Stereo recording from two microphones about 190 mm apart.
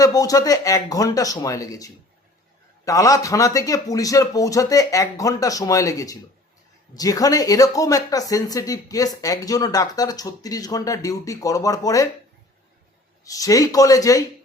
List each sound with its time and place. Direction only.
0.0 s speech: 20° left (ahead or behind)
13.2 s speech: 20° left (ahead or behind)